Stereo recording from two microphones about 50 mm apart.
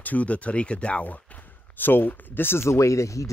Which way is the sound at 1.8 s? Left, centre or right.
Left.